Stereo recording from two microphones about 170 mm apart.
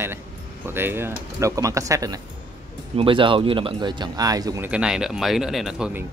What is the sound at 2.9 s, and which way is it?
Speech, 30° right (ahead or behind).